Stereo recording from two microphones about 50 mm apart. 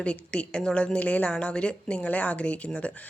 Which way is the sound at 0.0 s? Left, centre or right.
Left.